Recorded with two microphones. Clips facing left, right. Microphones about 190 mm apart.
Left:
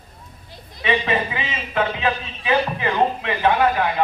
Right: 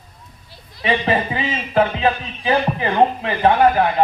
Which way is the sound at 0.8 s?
35° right (ahead or behind).